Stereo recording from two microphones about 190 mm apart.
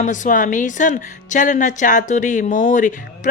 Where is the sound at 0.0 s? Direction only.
40° left (ahead or behind).